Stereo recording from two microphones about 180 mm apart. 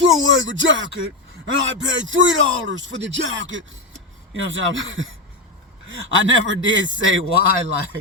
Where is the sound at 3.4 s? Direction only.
90° right.